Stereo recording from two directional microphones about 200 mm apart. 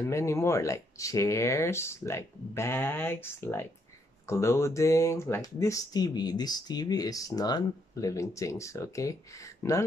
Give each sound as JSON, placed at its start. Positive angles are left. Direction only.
{"t": 0.0, "sound": "speech", "side_deg": 15}